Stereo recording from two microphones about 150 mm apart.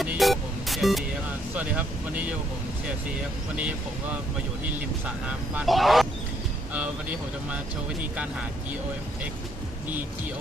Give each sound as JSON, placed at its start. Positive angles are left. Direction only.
{"t": 0.0, "sound": "music", "side_deg": 0}
{"t": 1.5, "sound": "speech", "side_deg": -10}
{"t": 3.6, "sound": "speech", "side_deg": -10}
{"t": 5.6, "sound": "speech", "side_deg": 0}